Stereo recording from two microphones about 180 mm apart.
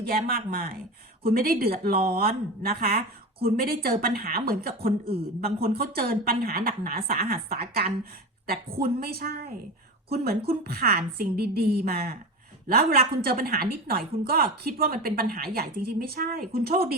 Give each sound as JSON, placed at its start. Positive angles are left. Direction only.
{"t": 0.0, "sound": "a woman's voice", "side_deg": -55}